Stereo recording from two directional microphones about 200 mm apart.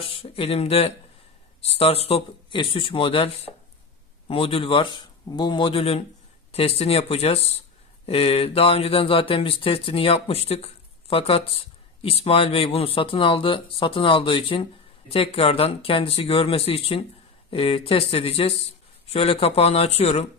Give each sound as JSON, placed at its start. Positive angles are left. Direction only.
{"t": 0.0, "sound": "speech", "side_deg": 30}